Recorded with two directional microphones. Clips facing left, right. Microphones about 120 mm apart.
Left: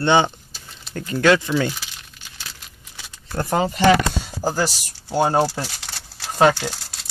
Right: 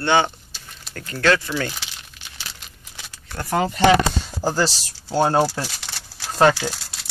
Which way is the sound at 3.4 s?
20° left (ahead or behind).